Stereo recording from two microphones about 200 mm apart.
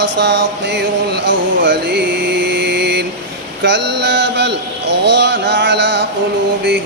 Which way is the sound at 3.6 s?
60° right (ahead or behind).